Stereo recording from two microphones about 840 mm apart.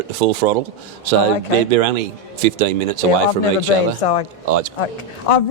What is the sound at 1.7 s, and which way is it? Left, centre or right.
Speech, right.